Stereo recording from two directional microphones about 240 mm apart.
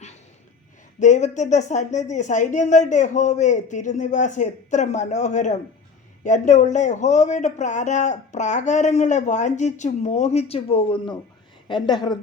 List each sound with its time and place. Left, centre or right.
0.9 s speech: left